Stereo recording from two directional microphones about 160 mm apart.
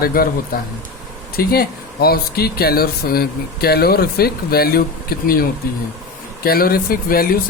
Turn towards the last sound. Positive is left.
turn(degrees=65)  # may be behind; listen again after turning